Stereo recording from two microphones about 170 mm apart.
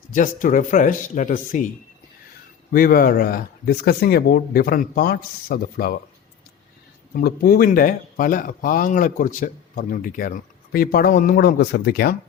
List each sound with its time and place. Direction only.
0.1 s speech: 50° left (ahead or behind)
2.7 s speech: 60° left (ahead or behind)
7.1 s speech: 60° left (ahead or behind)